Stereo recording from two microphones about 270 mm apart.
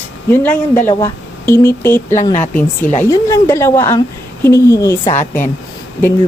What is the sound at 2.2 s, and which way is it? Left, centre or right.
Speech, left.